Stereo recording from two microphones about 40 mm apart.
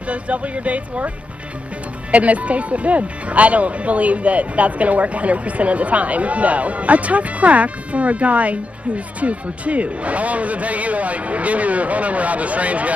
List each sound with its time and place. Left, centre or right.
0.1 s speech: right